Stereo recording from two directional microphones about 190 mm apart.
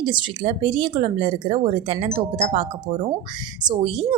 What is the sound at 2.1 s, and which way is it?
Wind chime, 30° right (ahead or behind).